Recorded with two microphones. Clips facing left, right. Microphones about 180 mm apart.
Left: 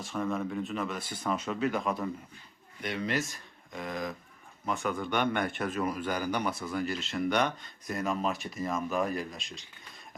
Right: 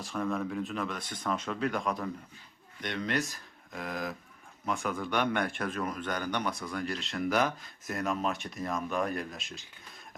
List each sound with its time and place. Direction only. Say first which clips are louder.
0.0 s a man's voice: even; centre (ahead or behind)